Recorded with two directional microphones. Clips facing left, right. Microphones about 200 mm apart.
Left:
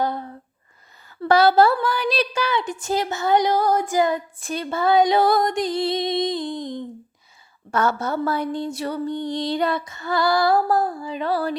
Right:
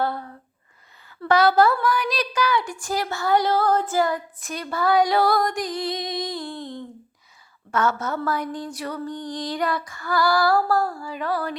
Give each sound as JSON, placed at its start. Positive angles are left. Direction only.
{"t": 0.0, "sound": "a sound", "side_deg": 20}
{"t": 1.2, "sound": "a woman's voice", "side_deg": 30}
{"t": 7.7, "sound": "a woman's voice", "side_deg": 35}